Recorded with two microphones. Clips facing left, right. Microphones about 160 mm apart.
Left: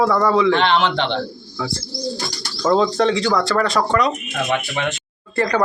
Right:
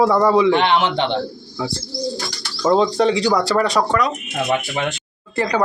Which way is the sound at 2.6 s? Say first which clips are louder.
Right 1 dB; 15° right (ahead or behind).